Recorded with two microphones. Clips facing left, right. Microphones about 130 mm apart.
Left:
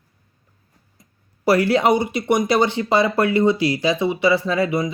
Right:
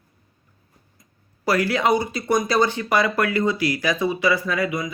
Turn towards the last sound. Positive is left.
turn(degrees=30)  # may be behind; listen again after turning